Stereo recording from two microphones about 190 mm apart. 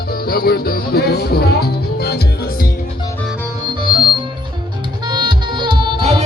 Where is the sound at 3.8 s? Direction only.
25° right (ahead or behind).